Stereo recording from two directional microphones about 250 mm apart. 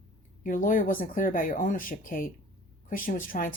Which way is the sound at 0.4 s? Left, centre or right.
Left.